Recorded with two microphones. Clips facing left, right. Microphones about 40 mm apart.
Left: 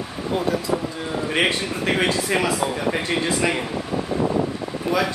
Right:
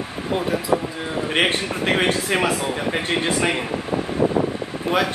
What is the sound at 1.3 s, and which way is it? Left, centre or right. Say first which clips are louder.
A man's voice: right 1 dB; right.